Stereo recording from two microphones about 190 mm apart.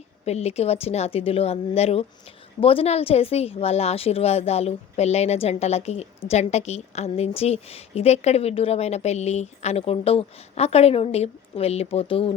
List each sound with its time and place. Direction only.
0.3 s a woman's voice: 35° left (ahead or behind)